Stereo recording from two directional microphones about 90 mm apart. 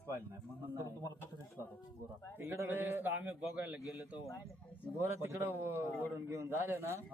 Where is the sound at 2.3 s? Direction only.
25° right (ahead or behind).